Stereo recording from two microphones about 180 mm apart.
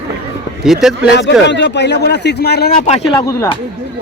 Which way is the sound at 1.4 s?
75° left (ahead or behind).